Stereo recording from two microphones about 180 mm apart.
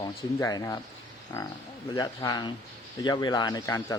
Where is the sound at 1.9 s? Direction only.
20° left (ahead or behind).